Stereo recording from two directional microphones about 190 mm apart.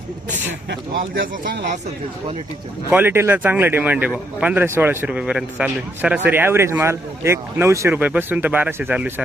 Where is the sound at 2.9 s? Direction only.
10° right (ahead or behind).